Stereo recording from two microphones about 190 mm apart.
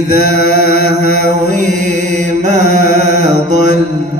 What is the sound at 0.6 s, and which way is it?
Mantra, 40° right (ahead or behind).